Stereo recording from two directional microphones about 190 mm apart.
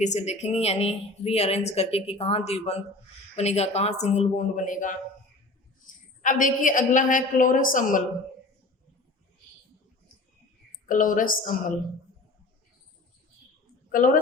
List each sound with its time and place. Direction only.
0.0 s a woman's voice: 35° left (ahead or behind)
6.2 s a woman's voice: 45° left (ahead or behind)
10.8 s a woman's voice: 45° left (ahead or behind)
13.9 s a woman's voice: 45° left (ahead or behind)